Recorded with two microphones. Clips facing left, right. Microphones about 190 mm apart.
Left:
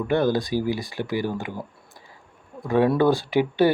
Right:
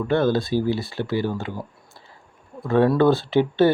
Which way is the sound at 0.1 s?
15° left (ahead or behind).